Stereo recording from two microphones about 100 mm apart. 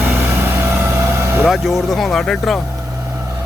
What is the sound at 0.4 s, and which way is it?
Vehicle, 25° right (ahead or behind).